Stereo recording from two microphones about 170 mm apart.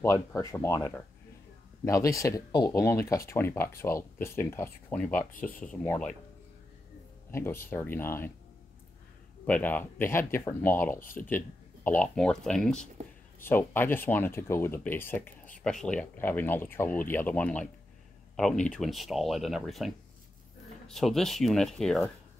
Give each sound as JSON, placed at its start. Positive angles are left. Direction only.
{"t": 0.4, "sound": "speech", "side_deg": 20}
{"t": 5.3, "sound": "speech", "side_deg": 55}
{"t": 5.7, "sound": "speech", "side_deg": 10}
{"t": 7.2, "sound": "speech", "side_deg": 15}
{"t": 9.5, "sound": "speech", "side_deg": 10}